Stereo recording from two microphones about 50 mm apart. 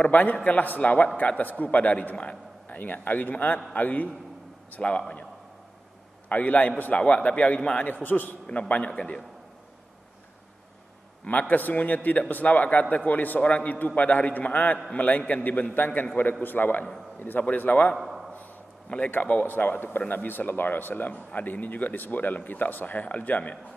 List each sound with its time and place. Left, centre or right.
0.0 s a man's voice: left
6.2 s a man's voice: left
7.9 s a man's voice: left
8.5 s a man's voice: left
11.2 s a man's voice: left
17.9 s a sound: centre
19.0 s a man's voice: left